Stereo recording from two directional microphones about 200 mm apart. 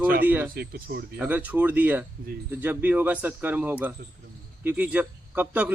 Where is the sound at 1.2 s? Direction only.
10° right (ahead or behind).